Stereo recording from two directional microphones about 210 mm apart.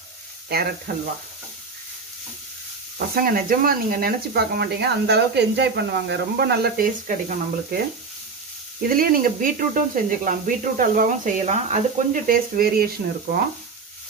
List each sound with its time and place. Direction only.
0.9 s speech: 45° right (ahead or behind)
3.2 s speech: 45° right (ahead or behind)
8.8 s speech: 45° right (ahead or behind)